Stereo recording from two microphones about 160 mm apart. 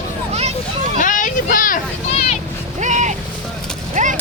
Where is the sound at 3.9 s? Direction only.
50° right (ahead or behind).